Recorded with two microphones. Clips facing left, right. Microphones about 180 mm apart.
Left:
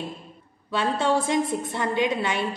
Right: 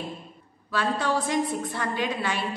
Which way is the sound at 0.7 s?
25° left (ahead or behind).